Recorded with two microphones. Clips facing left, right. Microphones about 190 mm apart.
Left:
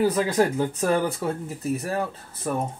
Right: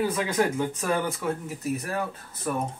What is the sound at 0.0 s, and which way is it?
Speech, 40° left (ahead or behind).